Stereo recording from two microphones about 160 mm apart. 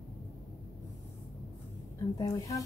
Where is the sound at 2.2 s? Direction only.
20° left (ahead or behind).